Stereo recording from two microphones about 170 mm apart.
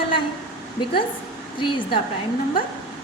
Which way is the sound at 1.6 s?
30° left (ahead or behind).